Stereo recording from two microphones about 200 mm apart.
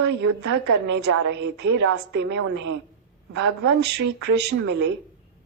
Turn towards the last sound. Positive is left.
turn(degrees=-55)  # may be behind; listen again after turning